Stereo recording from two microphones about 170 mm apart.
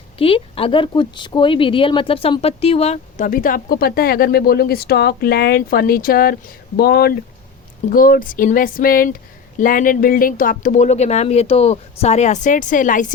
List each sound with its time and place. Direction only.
0.2 s speech: 35° left (ahead or behind); by 13.1 s 50° left (ahead or behind)